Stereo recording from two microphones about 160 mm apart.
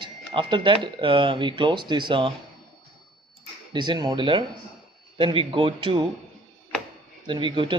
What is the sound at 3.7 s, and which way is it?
A man's voice, 30° right (ahead or behind).